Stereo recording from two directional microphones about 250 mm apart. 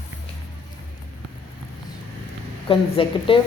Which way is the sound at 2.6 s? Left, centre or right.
Left.